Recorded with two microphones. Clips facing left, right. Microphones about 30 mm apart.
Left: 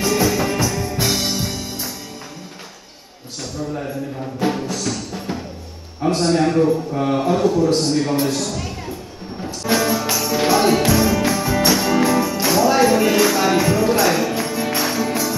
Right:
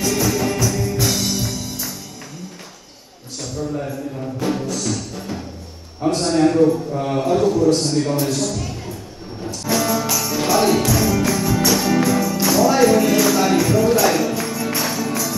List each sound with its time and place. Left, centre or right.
0.0 s music: centre
4.4 s music: centre
6.0 s a sound: centre
9.7 s music: centre